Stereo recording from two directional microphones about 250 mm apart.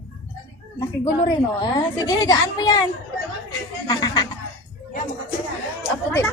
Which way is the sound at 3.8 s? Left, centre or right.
Centre.